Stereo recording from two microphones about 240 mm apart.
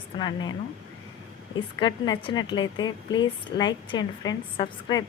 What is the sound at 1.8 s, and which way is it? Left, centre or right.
A woman's voice, centre.